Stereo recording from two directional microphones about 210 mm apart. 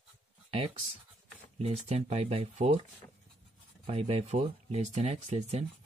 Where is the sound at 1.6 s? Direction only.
30° right (ahead or behind).